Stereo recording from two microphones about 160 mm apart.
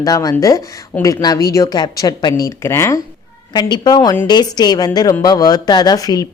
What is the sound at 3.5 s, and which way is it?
Speech, 25° left (ahead or behind).